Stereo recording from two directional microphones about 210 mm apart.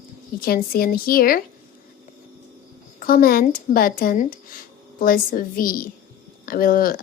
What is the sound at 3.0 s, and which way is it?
A woman's voice, 40° left (ahead or behind).